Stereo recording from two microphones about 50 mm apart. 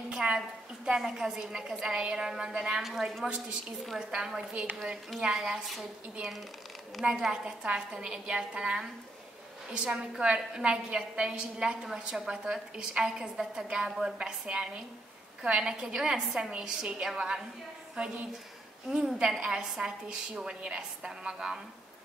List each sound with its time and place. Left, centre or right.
0.1 s a sound: centre
0.8 s a woman's voice: centre
2.8 s a woman's voice: centre
5.4 s a woman's voice: centre
7.1 s a woman's voice: centre